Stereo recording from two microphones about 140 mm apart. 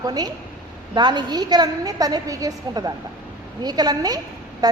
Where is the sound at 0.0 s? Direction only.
30° right (ahead or behind).